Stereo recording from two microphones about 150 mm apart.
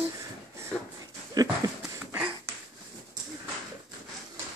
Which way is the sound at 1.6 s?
25° right (ahead or behind).